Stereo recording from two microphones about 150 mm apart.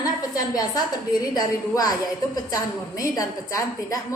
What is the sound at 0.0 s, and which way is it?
A woman's voice, 25° left (ahead or behind).